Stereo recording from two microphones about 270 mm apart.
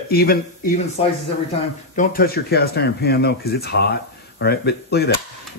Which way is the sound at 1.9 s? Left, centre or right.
Left.